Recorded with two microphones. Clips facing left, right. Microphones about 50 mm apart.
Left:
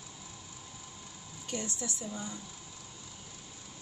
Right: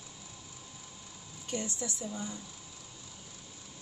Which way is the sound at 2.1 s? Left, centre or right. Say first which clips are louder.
Right 1 dB; centre.